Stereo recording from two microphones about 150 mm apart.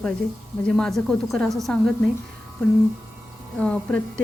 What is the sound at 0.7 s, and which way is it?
Speech, centre (ahead or behind).